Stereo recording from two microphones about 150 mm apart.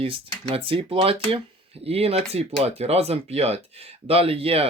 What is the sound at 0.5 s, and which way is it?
Speech, 35° right (ahead or behind).